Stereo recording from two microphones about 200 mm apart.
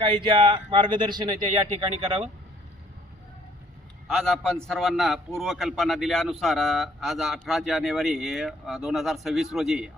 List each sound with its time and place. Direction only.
0.0 s speech: 25° right (ahead or behind)
4.1 s a man's voice: centre (ahead or behind)